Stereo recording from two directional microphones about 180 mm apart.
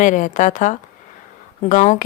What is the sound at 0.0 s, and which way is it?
Speech, 45° left (ahead or behind).